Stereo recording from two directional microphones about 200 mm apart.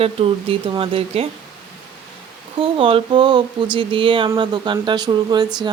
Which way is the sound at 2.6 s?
25° right (ahead or behind).